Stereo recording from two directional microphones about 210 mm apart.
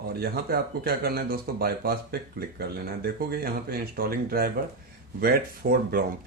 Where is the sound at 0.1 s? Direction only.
45° right (ahead or behind).